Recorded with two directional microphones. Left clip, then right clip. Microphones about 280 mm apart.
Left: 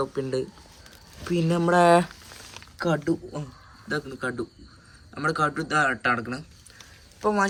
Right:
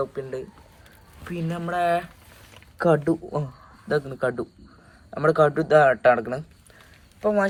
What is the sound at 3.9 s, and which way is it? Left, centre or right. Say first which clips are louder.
Speech: right 5 dB; centre.